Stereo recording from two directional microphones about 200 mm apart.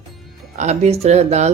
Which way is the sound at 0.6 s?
35° right (ahead or behind).